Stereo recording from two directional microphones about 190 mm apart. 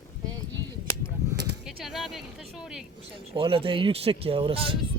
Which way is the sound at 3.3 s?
30° right (ahead or behind).